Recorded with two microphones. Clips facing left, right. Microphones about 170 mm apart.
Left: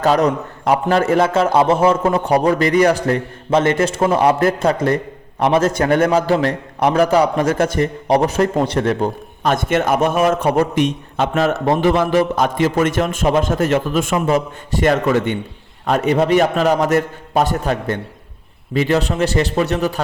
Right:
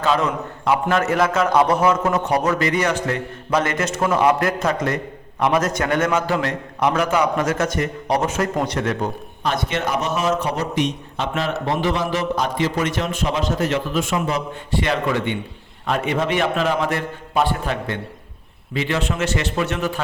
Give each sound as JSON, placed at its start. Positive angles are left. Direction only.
{"t": 0.0, "sound": "a man's voice", "side_deg": 40}
{"t": 9.4, "sound": "a man's voice", "side_deg": 50}